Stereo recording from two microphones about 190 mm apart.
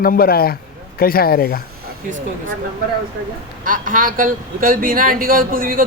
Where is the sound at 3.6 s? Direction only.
45° right (ahead or behind).